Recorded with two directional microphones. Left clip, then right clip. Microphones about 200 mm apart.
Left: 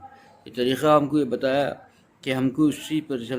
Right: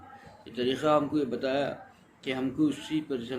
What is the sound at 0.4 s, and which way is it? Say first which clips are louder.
Speech: left 6 dB; 55° left (ahead or behind).